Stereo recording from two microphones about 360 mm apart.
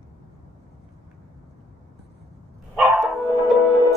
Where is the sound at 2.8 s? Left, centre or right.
Centre.